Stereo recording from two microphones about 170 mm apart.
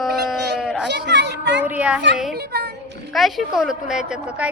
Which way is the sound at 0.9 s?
90° right.